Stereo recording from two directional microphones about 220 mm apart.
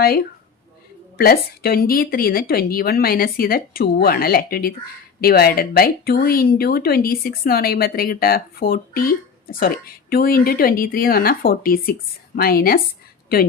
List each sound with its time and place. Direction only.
0.0 s speech: 45° left (ahead or behind)